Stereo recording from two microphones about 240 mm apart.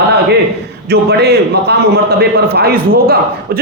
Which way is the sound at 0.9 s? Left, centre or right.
Right.